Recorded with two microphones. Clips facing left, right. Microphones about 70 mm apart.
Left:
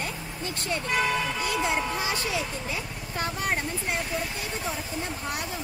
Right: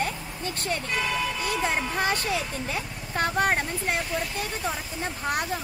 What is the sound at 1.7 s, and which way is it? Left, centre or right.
Speech, right.